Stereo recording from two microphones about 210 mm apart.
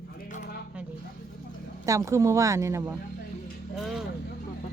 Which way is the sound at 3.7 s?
Centre (ahead or behind).